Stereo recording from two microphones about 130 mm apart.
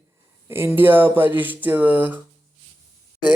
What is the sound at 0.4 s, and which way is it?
Speech, 20° right (ahead or behind).